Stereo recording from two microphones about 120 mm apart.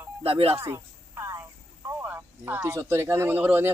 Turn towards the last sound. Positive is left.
turn(degrees=-15)  # may be behind; listen again after turning